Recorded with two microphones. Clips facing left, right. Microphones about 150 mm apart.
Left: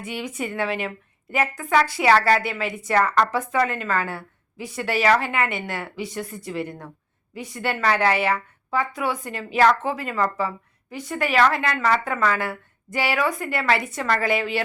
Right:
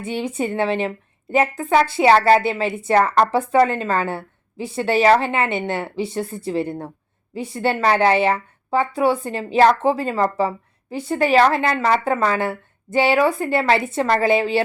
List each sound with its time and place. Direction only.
0.0 s a woman's voice: 30° right (ahead or behind)